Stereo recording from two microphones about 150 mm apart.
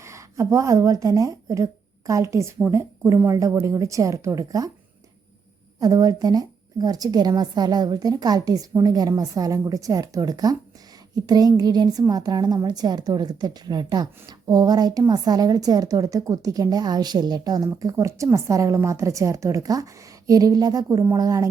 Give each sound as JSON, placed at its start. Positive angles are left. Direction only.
{"t": 0.0, "sound": "a woman's voice", "side_deg": -20}
{"t": 5.8, "sound": "a woman's voice", "side_deg": -25}